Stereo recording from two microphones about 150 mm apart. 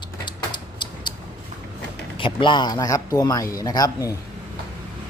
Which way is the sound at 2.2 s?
30° left (ahead or behind).